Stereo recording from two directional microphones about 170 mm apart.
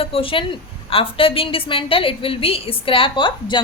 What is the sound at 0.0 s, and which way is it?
A woman's voice, 35° left (ahead or behind).